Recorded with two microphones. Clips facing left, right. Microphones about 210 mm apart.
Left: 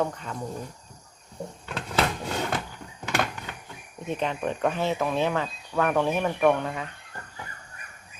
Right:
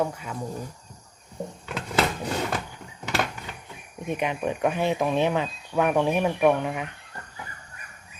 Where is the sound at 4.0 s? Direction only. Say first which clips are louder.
Right 1 dB; 15° right (ahead or behind).